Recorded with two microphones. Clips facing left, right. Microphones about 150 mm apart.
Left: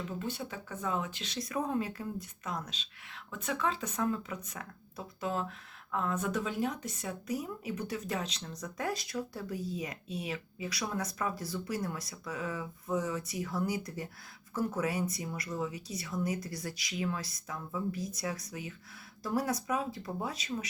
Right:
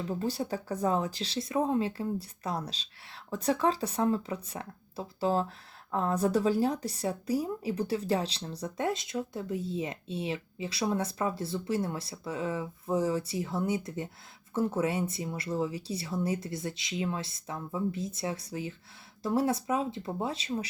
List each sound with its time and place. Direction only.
0.1 s speech: 35° right (ahead or behind)